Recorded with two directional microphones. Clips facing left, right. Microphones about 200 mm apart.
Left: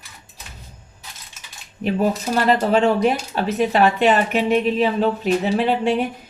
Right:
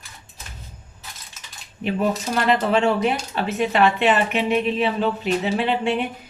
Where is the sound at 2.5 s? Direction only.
40° left (ahead or behind).